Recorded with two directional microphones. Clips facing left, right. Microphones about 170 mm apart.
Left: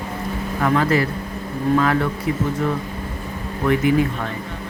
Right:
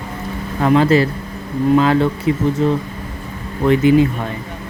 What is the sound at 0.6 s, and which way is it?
Speech, 25° right (ahead or behind).